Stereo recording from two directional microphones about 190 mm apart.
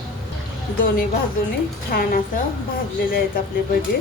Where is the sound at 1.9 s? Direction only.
50° left (ahead or behind).